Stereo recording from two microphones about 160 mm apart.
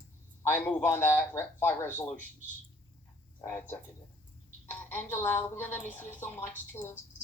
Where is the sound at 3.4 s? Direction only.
15° left (ahead or behind).